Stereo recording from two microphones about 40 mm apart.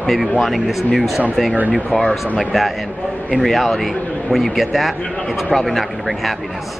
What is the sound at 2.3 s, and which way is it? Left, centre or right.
A man's voice, centre.